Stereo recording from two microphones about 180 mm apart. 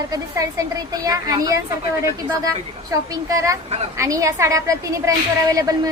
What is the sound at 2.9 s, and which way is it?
A woman's voice, 20° right (ahead or behind).